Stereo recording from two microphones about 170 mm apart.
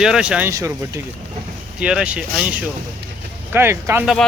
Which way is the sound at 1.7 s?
5° right (ahead or behind).